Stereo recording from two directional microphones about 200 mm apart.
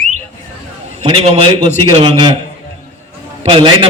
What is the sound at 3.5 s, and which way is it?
Speech, 25° right (ahead or behind).